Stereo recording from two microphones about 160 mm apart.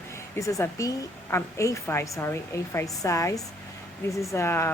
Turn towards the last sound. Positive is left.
turn(degrees=15)  # may be behind; listen again after turning